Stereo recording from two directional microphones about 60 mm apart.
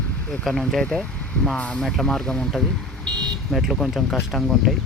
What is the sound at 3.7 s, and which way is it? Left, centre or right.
Speech, centre.